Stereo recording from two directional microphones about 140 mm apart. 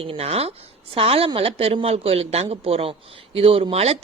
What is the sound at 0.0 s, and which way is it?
Speech, 45° right (ahead or behind).